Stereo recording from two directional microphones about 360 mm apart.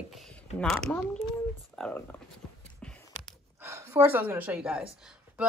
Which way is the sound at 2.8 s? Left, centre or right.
Centre.